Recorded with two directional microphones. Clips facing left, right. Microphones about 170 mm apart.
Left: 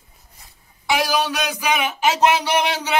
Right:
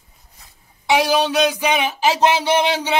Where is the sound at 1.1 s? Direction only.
25° right (ahead or behind).